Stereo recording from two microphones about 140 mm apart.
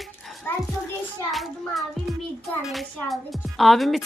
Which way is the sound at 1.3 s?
Centre (ahead or behind).